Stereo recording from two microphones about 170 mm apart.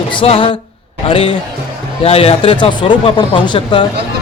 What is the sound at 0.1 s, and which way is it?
A man's voice, 30° left (ahead or behind).